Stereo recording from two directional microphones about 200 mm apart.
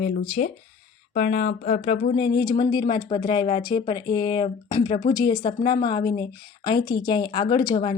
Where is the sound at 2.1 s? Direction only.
25° left (ahead or behind).